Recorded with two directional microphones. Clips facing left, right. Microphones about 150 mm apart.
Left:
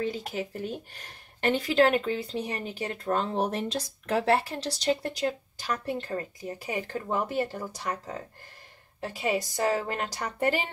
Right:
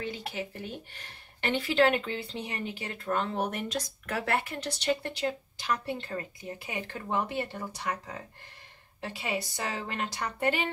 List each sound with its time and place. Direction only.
0.0 s a sound: 40° left (ahead or behind)
0.9 s speech: 40° left (ahead or behind)
9.0 s speech: 45° left (ahead or behind)